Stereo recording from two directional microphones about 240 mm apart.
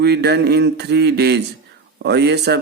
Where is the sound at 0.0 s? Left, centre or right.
Right.